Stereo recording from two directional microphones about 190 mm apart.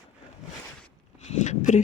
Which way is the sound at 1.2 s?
40° left (ahead or behind).